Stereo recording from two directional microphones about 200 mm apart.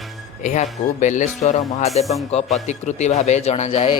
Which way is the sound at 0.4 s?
35° left (ahead or behind).